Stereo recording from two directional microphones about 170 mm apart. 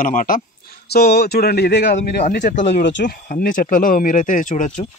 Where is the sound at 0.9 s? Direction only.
70° left (ahead or behind).